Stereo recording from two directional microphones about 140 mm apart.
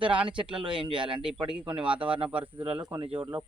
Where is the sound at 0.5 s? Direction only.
35° right (ahead or behind).